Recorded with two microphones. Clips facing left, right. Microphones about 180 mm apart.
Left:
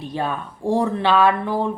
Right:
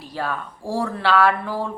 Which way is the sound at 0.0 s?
20° left (ahead or behind).